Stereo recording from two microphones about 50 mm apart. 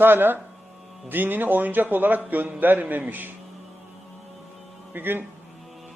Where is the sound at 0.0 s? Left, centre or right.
Right.